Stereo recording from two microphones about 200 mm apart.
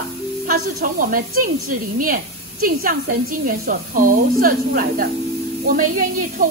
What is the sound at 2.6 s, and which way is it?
A woman's voice, 45° right (ahead or behind).